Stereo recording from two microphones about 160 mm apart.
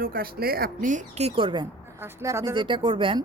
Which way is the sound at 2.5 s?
30° right (ahead or behind).